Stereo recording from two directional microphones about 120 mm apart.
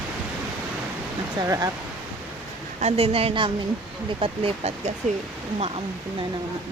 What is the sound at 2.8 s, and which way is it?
Speech, 60° right (ahead or behind).